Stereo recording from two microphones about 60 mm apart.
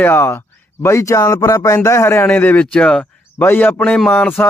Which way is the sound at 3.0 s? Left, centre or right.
Left.